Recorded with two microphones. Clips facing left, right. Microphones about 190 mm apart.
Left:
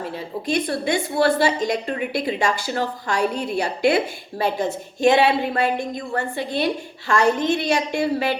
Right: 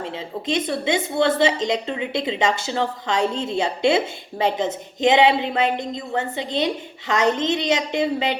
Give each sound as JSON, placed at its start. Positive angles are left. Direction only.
{"t": 0.0, "sound": "a woman's voice", "side_deg": -20}